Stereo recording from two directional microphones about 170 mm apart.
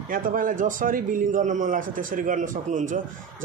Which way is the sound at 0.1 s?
55° right (ahead or behind).